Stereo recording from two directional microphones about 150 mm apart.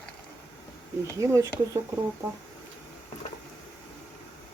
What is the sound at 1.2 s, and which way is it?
Speech, 20° right (ahead or behind).